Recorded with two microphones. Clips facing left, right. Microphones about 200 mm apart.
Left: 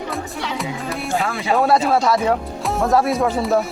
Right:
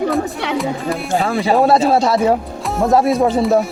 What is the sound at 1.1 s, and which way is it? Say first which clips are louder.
Speech: right 4 dB; 30° right (ahead or behind).